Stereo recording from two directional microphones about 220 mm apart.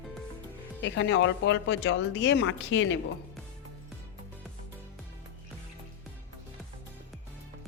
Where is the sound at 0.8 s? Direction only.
55° left (ahead or behind).